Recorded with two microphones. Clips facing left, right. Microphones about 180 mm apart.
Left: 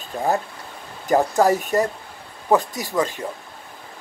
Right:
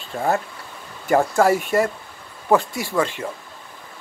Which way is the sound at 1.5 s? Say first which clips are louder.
Right 1 dB; 40° left (ahead or behind).